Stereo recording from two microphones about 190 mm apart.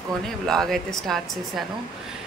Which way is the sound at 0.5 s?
Centre (ahead or behind).